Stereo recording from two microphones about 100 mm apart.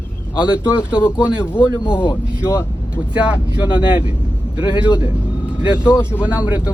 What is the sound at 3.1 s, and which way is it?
Speech, 10° right (ahead or behind).